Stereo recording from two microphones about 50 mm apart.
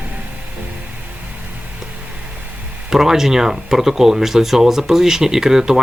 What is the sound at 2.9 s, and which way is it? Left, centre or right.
Speech, centre.